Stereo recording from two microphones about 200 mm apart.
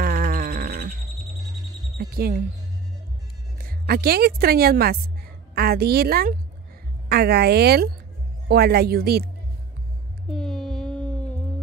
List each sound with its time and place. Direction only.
0.0 s music: 45° right (ahead or behind)
2.0 s speech: 50° right (ahead or behind)
3.5 s a woman's voice: 50° right (ahead or behind)
10.3 s a sound: 5° left (ahead or behind)